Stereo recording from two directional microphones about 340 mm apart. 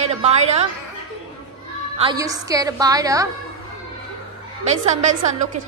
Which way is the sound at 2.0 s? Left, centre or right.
Centre.